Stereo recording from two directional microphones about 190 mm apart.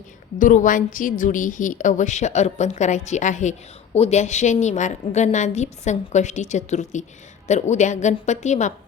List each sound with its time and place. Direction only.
0.3 s a woman's voice: 40° left (ahead or behind)